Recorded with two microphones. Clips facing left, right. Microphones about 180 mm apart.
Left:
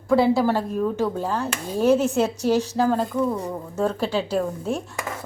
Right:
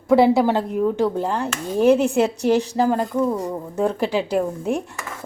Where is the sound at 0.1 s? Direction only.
20° right (ahead or behind).